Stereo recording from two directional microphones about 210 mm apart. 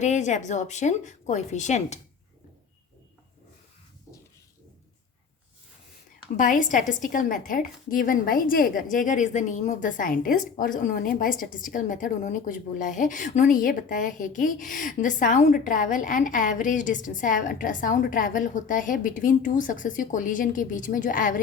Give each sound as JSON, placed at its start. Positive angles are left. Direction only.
{"t": 0.0, "sound": "speech", "side_deg": 35}
{"t": 6.3, "sound": "speech", "side_deg": 40}